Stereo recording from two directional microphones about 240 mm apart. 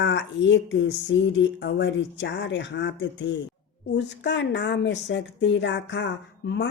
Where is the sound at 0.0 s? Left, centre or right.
Left.